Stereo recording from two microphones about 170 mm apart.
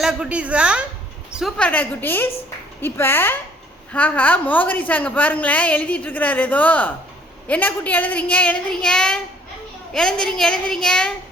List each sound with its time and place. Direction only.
0.0 s a woman's voice: 5° right (ahead or behind)